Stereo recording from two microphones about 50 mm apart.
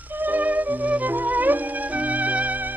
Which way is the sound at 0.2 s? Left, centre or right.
Right.